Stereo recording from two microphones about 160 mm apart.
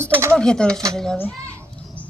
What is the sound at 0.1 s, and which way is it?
Speech, 15° right (ahead or behind).